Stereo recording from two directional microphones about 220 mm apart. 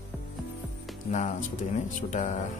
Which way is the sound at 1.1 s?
35° left (ahead or behind).